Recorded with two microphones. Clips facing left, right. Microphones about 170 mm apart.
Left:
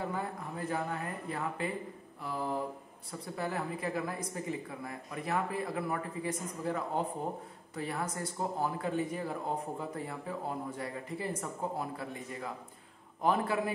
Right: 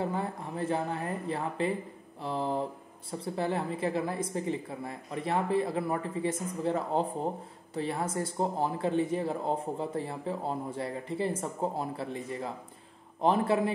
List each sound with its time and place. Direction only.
0.1 s speech: 25° right (ahead or behind)